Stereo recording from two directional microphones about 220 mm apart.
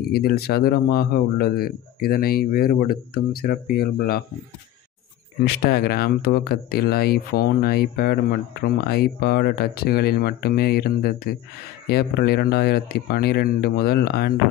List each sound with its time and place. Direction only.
0.1 s speech: 45° left (ahead or behind)
5.4 s speech: 45° left (ahead or behind)